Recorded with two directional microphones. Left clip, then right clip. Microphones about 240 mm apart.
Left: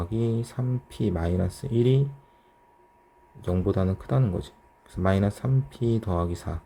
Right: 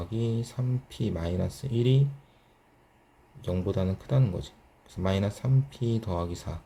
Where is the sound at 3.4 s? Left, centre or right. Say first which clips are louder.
Left 4 dB; left.